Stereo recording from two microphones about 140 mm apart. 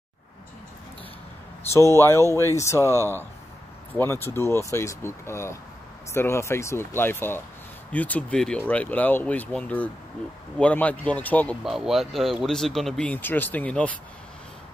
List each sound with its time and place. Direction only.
1.7 s speech: 20° left (ahead or behind)
2.2 s speech: 20° right (ahead or behind)
2.5 s speech: 20° left (ahead or behind)
4.0 s speech: 15° left (ahead or behind)
11.6 s speech: centre (ahead or behind)